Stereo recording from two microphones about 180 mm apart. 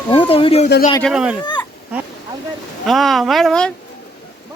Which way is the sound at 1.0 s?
5° right (ahead or behind).